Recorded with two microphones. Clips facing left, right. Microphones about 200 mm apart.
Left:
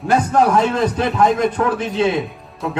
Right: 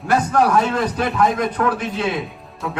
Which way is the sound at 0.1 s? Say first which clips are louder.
Left 2 dB; 25° left (ahead or behind).